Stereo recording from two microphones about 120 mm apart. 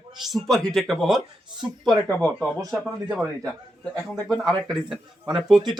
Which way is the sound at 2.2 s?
10° left (ahead or behind).